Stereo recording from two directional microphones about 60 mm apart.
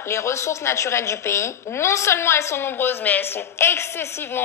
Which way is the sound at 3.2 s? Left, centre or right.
Left.